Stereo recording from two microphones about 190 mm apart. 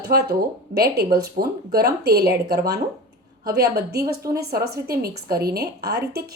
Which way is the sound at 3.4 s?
55° right (ahead or behind).